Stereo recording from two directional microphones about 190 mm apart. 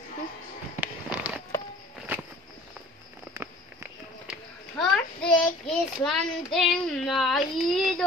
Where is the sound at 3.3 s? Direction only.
15° right (ahead or behind).